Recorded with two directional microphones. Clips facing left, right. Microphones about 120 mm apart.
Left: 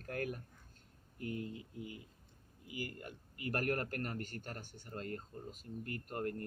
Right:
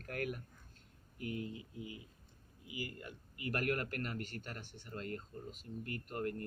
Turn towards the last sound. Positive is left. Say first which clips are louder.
# even
turn(degrees=40)  # may be behind; listen again after turning